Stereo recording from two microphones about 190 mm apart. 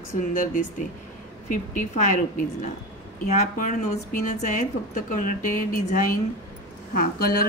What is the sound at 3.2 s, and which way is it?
A woman's voice, 45° left (ahead or behind).